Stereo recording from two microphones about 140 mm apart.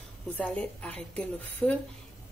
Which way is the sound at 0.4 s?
10° left (ahead or behind).